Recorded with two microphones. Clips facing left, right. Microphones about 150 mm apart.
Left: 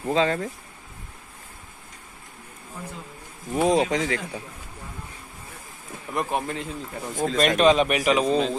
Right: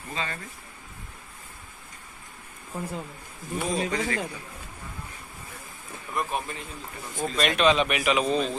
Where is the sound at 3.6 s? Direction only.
90° left.